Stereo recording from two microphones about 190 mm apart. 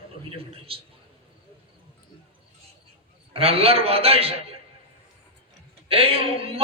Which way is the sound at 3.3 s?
30° right (ahead or behind).